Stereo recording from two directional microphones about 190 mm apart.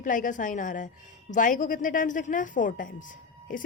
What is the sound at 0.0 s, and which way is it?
A woman's voice, 45° left (ahead or behind).